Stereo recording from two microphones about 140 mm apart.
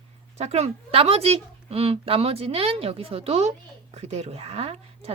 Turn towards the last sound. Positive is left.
turn(degrees=-45)  # may be behind; listen again after turning